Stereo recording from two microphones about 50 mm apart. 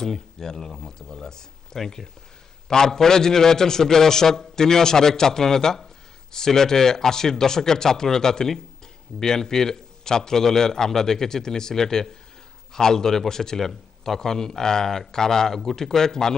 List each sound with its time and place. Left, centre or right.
0.0 s a man's voice: centre